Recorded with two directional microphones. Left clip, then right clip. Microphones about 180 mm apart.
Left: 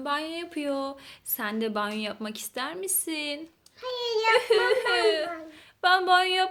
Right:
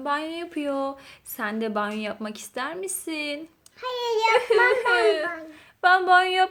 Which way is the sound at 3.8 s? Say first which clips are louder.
Right 3 dB; 50° right (ahead or behind).